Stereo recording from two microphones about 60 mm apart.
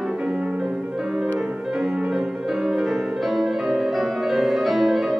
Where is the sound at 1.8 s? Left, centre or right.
Centre.